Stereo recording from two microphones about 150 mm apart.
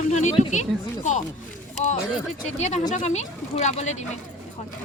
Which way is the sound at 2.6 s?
50° left (ahead or behind).